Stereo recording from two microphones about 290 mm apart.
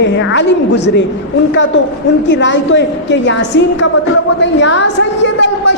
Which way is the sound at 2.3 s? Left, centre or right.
Left.